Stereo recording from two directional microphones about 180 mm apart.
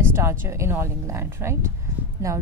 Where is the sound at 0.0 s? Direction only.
15° right (ahead or behind).